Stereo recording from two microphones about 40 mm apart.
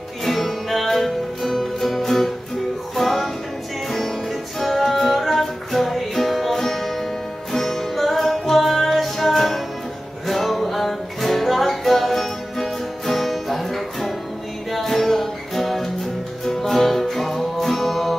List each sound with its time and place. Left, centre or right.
0.2 s music: centre